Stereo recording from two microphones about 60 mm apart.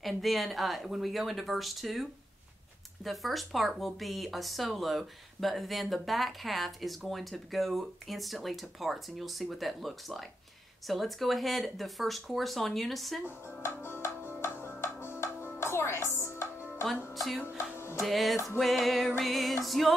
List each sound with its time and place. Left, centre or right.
0.0 s speech: centre
13.6 s music: left
17.1 s speech: centre
17.6 s music: left
18.0 s speech: centre